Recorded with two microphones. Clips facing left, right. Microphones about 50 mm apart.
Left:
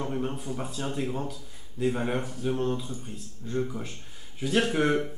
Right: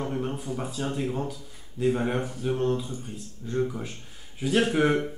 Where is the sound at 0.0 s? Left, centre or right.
Centre.